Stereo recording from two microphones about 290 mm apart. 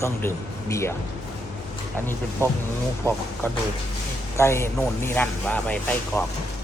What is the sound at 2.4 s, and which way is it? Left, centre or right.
Speech, centre.